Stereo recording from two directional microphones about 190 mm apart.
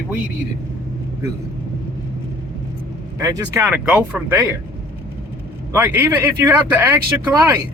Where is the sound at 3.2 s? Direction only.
15° right (ahead or behind).